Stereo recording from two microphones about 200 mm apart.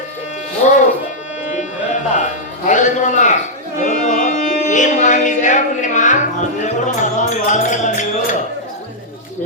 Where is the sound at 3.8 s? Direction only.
40° left (ahead or behind).